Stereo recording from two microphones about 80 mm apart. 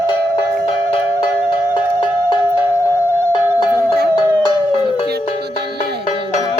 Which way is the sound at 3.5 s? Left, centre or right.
Left.